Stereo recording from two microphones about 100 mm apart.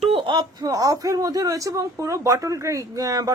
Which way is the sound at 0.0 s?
70° right (ahead or behind).